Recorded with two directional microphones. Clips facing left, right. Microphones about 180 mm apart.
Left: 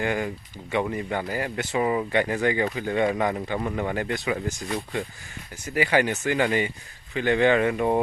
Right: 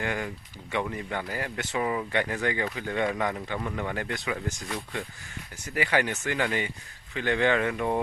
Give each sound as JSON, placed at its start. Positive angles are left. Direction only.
{"t": 0.0, "sound": "speech", "side_deg": 10}
{"t": 3.6, "sound": "speech", "side_deg": 25}